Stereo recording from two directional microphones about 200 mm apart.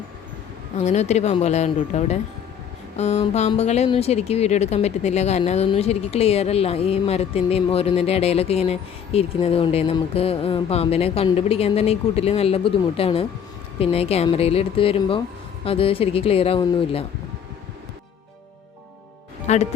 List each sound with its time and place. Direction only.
0.8 s speech: 35° left (ahead or behind)
19.5 s speech: 35° left (ahead or behind)